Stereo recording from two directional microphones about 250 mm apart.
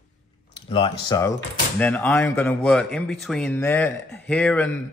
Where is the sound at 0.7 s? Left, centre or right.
Centre.